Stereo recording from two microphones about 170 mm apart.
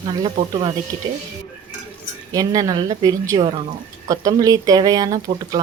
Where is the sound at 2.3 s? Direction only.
20° right (ahead or behind).